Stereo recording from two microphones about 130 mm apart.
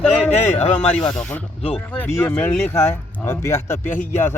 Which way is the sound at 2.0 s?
10° left (ahead or behind).